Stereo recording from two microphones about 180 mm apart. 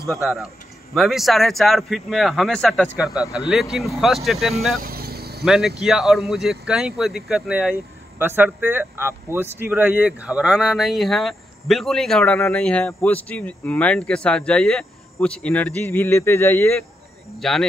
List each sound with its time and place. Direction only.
0.1 s speech: centre (ahead or behind)
4.8 s vehicle: 60° right (ahead or behind)
5.4 s speech: centre (ahead or behind)
17.4 s speech: centre (ahead or behind)